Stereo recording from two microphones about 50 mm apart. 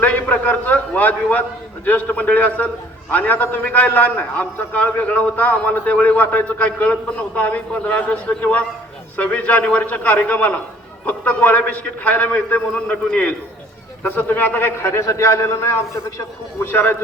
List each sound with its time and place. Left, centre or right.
0.0 s a man's voice: left
14.8 s a man's voice: left
15.9 s a man's voice: left
16.6 s a man's voice: left